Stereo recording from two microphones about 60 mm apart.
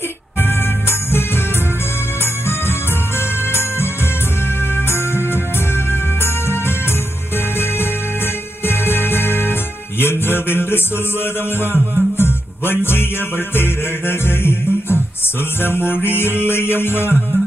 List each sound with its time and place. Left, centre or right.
0.4 s music: left
8.6 s music: left